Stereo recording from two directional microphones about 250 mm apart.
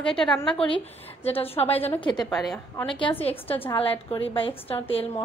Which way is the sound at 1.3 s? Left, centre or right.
Left.